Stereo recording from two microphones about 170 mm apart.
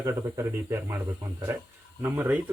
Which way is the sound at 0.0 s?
15° right (ahead or behind).